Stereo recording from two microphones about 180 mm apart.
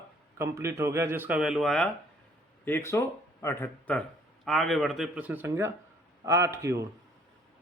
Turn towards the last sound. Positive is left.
turn(degrees=-15)  # may be behind; listen again after turning